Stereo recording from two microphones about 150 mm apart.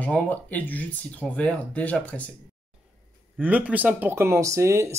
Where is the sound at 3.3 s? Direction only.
10° right (ahead or behind).